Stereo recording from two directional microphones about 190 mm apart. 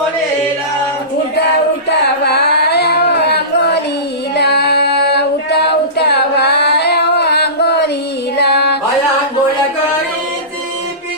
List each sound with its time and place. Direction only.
1.9 s a sound: 60° left (ahead or behind)
4.4 s singing: 60° left (ahead or behind)
8.4 s music: 60° left (ahead or behind)